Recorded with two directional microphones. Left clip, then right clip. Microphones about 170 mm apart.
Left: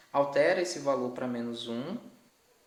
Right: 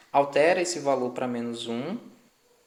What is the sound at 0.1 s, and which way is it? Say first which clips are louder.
A man's voice: right 4 dB; 15° right (ahead or behind).